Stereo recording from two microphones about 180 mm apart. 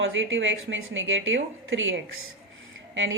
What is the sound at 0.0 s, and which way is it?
A woman's voice, 90° right.